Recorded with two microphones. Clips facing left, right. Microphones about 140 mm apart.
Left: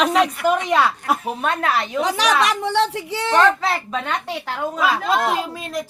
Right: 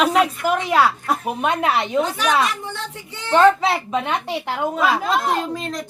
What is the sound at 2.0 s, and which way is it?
A woman's voice, 85° left.